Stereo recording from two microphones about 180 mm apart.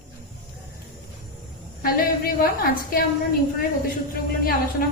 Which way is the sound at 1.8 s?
55° left (ahead or behind).